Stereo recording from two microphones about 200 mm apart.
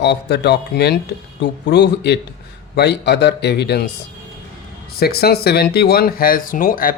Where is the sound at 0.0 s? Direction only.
55° left (ahead or behind).